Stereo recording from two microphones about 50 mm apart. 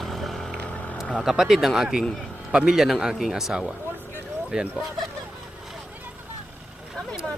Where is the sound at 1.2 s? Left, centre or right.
Centre.